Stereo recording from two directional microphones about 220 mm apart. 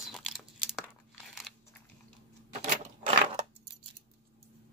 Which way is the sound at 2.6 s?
30° right (ahead or behind).